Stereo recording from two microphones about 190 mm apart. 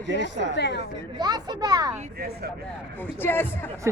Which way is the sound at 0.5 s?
60° left (ahead or behind).